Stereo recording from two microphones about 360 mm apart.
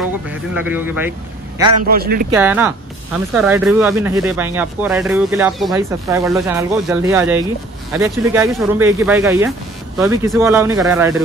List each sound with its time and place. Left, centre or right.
0.3 s speech: centre
1.9 s speech: right
2.3 s speech: centre